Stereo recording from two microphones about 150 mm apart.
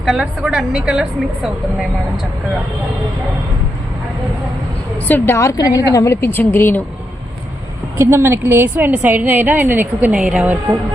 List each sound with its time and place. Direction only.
0.0 s a woman's voice: 5° right (ahead or behind)
5.0 s a woman's voice: 15° left (ahead or behind)
7.9 s a woman's voice: 15° right (ahead or behind)